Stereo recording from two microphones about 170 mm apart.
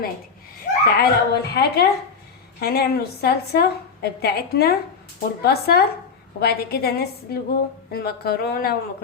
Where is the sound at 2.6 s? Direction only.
65° left (ahead or behind).